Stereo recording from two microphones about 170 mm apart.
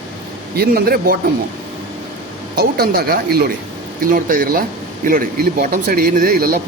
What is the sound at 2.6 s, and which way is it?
Speech, 65° right (ahead or behind).